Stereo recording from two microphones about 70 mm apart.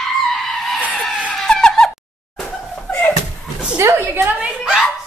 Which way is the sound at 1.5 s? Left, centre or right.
Centre.